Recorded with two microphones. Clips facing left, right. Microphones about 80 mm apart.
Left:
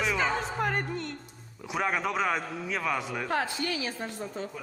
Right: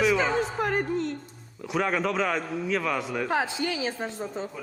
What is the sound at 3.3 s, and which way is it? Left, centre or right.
A woman's voice, centre.